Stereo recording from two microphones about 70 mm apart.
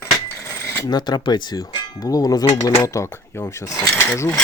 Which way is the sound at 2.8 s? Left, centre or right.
Left.